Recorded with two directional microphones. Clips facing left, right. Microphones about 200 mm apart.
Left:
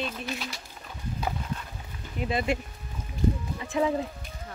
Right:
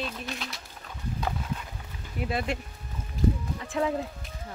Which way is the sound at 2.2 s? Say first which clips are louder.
Left 2 dB; centre (ahead or behind).